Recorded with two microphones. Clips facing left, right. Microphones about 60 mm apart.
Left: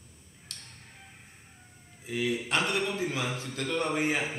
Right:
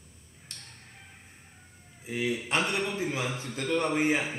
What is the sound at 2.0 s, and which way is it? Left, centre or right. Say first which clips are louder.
Speech: even; centre.